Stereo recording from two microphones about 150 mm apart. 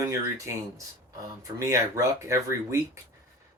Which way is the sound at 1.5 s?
20° right (ahead or behind).